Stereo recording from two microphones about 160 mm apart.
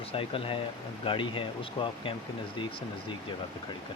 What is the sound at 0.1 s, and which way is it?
Speech, 35° left (ahead or behind).